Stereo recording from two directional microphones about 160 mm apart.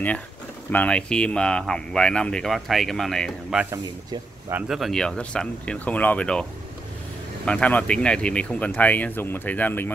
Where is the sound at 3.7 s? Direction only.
25° right (ahead or behind).